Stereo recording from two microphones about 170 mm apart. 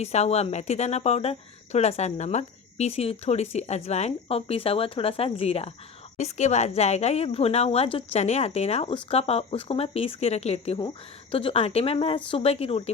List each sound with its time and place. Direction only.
0.0 s speech: 40° left (ahead or behind)